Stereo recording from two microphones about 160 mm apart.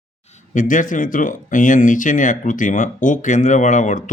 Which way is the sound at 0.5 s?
55° left (ahead or behind).